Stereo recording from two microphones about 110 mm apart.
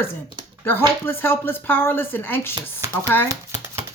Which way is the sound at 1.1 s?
20° left (ahead or behind).